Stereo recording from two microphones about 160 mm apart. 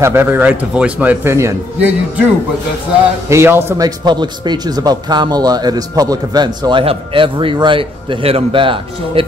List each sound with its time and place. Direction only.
0.0 s speech: 15° right (ahead or behind)
3.3 s a man's voice: 15° right (ahead or behind); by 9.2 s 35° right (ahead or behind)